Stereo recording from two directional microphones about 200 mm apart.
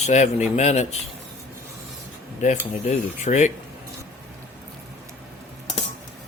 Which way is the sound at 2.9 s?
35° left (ahead or behind).